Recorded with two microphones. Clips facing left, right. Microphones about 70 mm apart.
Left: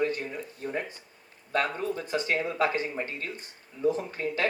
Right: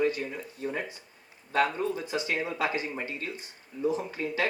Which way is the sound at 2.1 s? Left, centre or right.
Left.